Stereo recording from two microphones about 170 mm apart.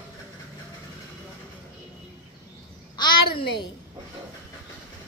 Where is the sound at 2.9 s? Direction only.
25° left (ahead or behind).